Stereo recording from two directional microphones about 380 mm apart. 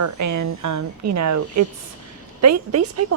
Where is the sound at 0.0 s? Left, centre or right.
Right.